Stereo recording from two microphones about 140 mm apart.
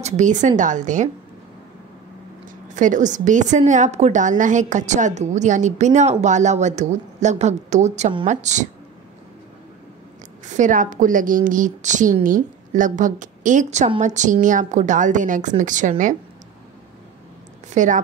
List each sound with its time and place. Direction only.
0.0 s a woman's voice: 60° right (ahead or behind)
2.7 s a woman's voice: 65° right (ahead or behind)
10.4 s a woman's voice: 60° right (ahead or behind)
17.7 s a woman's voice: 65° right (ahead or behind)